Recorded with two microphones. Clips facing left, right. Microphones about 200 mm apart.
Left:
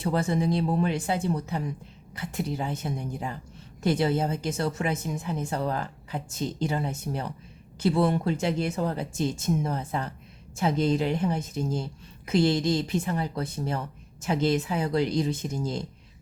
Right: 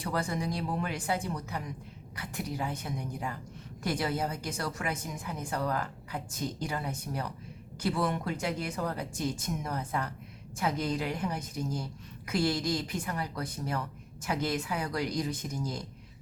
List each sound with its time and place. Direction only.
0.0 s a woman's voice: 25° left (ahead or behind)